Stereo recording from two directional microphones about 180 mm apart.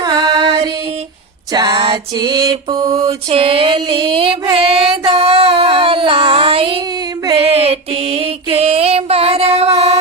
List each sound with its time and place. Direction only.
0.0 s music: 25° right (ahead or behind)
1.5 s mantra: 25° right (ahead or behind)
3.2 s music: 30° right (ahead or behind)
7.3 s a sound: 30° right (ahead or behind)
7.6 s music: 30° right (ahead or behind)